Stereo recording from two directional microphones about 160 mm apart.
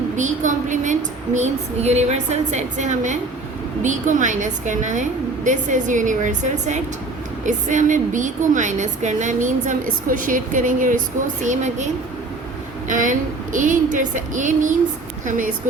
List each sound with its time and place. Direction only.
0.2 s female singing: 50° right (ahead or behind)
10.1 s speech: 55° right (ahead or behind)
11.4 s female singing: 50° right (ahead or behind)
12.9 s female singing: 55° right (ahead or behind)